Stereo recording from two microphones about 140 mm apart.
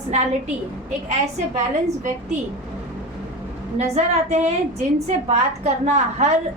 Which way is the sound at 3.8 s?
50° right (ahead or behind).